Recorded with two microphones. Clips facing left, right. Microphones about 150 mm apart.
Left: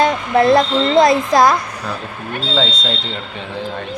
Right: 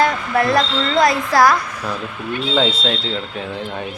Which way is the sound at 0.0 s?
20° left (ahead or behind).